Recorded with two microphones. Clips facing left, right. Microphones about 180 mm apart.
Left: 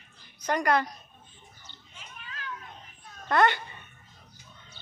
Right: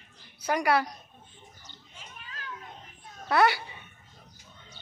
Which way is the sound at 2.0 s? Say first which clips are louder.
Left 2 dB; 40° right (ahead or behind).